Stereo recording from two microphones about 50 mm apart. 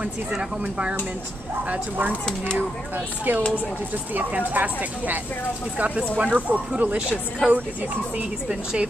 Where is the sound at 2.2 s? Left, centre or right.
Centre.